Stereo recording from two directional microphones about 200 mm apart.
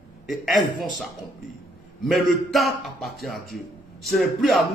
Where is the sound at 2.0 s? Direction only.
Centre (ahead or behind).